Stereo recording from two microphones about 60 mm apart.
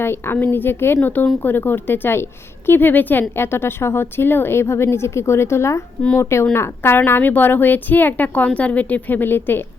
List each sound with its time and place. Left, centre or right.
0.0 s speech: left
3.3 s a woman's voice: left